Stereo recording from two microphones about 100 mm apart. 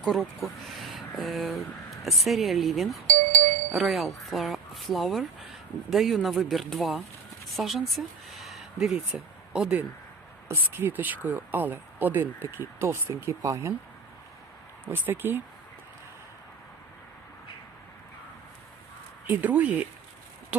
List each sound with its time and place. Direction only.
0.0 s speech: 5° left (ahead or behind)
10.5 s speech: 20° right (ahead or behind)
14.8 s speech: 20° right (ahead or behind)
19.3 s speech: 15° right (ahead or behind)
20.5 s a sound: 15° right (ahead or behind)